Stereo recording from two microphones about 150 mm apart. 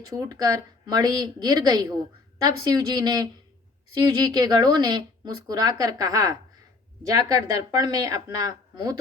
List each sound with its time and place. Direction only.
0.3 s speech: 25° right (ahead or behind)